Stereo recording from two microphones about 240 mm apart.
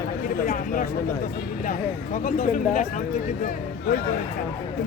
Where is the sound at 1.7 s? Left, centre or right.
Left.